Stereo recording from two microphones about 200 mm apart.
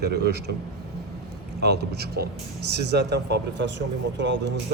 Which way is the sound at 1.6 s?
55° right (ahead or behind).